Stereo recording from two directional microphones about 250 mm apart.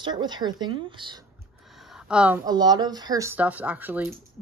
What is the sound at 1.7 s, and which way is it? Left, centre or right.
Speech, centre.